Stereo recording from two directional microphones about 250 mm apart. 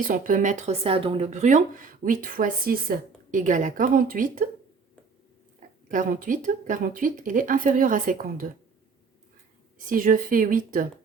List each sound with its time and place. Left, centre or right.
0.1 s speech: right
5.9 s speech: right
9.7 s speech: right